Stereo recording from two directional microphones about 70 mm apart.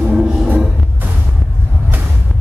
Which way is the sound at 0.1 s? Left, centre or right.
Centre.